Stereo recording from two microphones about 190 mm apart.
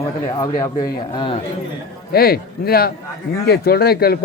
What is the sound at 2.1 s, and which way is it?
Speech, 50° left (ahead or behind).